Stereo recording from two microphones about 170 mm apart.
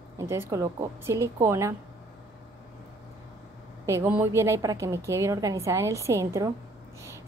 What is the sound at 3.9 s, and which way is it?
A woman's voice, 15° right (ahead or behind).